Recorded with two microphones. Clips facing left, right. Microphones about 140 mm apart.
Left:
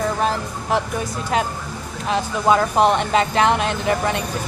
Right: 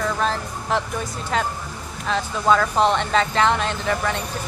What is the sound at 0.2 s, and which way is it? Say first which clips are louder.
A woman's voice: left 2 dB; 10° left (ahead or behind).